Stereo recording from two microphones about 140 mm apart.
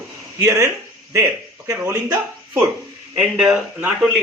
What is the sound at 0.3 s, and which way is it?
Speech, 20° right (ahead or behind).